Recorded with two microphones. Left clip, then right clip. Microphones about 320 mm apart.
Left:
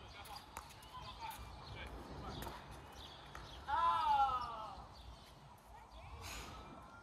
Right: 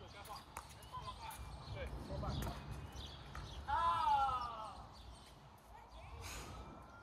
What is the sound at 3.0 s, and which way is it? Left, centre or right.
Basketball bounce, left.